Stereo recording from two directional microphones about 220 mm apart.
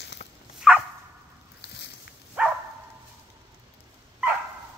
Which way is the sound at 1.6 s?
50° left (ahead or behind).